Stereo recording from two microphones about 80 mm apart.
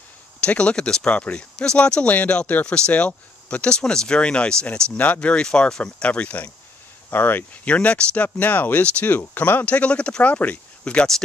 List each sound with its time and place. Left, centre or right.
0.4 s speech: centre
4.9 s speech: left